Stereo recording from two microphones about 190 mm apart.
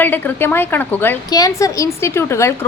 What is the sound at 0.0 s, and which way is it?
A woman's voice, 10° left (ahead or behind).